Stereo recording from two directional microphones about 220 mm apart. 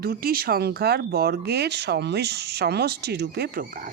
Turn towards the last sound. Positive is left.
turn(degrees=-40)  # may be behind; listen again after turning